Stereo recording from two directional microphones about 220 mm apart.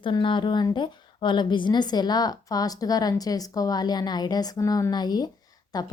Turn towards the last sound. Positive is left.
turn(degrees=15)  # may be behind; listen again after turning